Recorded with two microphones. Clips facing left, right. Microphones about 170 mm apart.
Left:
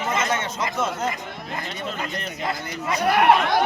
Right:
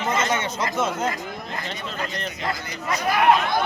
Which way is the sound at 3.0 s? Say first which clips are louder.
Left 1 dB; 65° left (ahead or behind).